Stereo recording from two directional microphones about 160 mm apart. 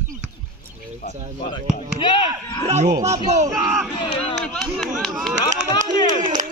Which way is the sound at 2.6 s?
45° right (ahead or behind).